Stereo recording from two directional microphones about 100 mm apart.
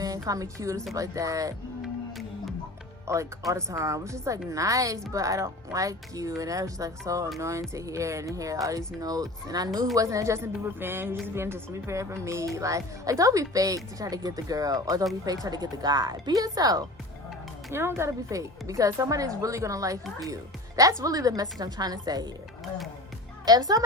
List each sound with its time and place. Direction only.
0.0 s a woman's voice: 35° right (ahead or behind)
3.1 s a woman's voice: 30° right (ahead or behind)
17.7 s a woman's voice: 25° right (ahead or behind); by 22.2 s 40° right (ahead or behind)
23.5 s a woman's voice: 40° right (ahead or behind)